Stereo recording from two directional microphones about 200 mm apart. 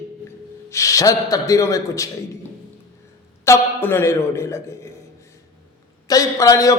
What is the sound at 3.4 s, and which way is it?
A man's voice, 10° left (ahead or behind).